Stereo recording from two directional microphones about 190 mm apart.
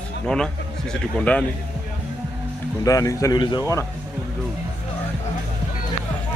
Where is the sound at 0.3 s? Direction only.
5° left (ahead or behind).